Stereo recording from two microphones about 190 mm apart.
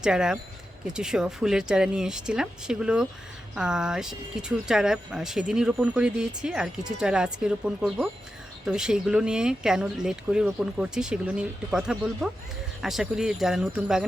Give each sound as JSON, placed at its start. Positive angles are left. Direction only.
{"t": 0.0, "sound": "speech", "side_deg": -5}